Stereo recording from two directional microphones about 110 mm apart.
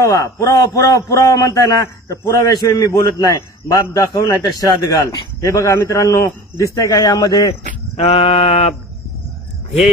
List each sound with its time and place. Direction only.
0.0 s a man's voice: 30° left (ahead or behind)
7.9 s mantra: 65° left (ahead or behind)